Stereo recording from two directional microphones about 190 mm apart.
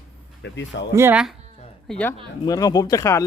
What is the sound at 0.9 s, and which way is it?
Speech, 10° right (ahead or behind).